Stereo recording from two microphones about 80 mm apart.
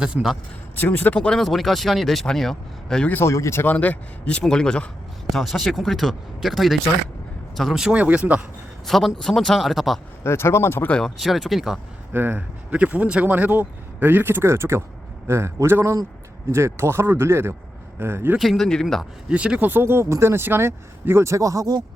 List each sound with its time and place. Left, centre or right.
0.0 s speech: centre
0.8 s speech: left
1.4 s speech: centre
3.1 s speech: left
3.7 s a man's voice: centre
8.9 s speech: centre
10.2 s speech: left
11.0 s speech: centre
12.1 s speech: right
18.3 s speech: centre
19.3 s speech: centre; by 21.8 s right